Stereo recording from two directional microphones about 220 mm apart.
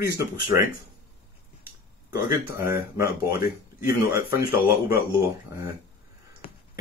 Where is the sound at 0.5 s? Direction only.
15° right (ahead or behind).